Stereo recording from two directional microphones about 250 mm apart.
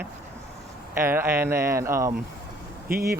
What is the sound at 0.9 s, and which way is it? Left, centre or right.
Speech, centre.